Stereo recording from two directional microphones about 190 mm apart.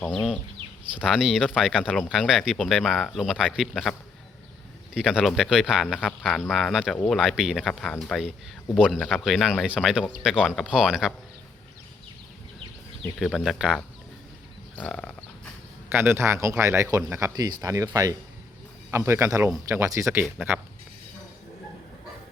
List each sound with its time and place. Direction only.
0.0 s speech: 5° left (ahead or behind)
4.9 s speech: 5° right (ahead or behind)
13.0 s speech: centre (ahead or behind)
15.9 s a man's voice: 10° right (ahead or behind)